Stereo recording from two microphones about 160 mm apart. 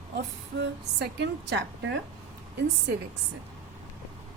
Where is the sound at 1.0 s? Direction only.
90° right.